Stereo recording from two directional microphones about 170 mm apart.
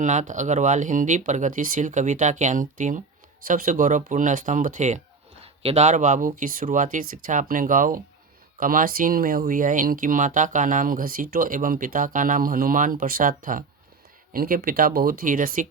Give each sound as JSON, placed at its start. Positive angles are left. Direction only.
{"t": 0.0, "sound": "speech", "side_deg": -45}